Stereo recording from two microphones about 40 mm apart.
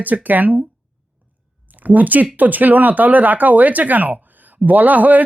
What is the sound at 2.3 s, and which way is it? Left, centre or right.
Speech, right.